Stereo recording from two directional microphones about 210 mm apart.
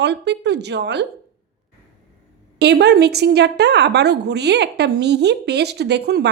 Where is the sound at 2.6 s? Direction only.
50° right (ahead or behind).